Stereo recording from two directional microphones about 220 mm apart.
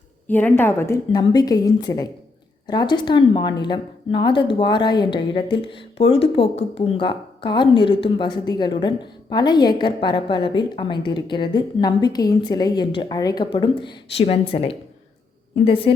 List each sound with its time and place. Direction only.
0.3 s a woman's voice: 10° left (ahead or behind); by 15.9 s 25° left (ahead or behind)